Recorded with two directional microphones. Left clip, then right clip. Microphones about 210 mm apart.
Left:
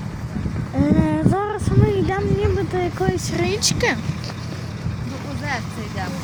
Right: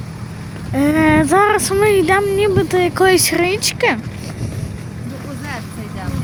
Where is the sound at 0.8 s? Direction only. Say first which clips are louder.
Right 7 dB; 30° right (ahead or behind).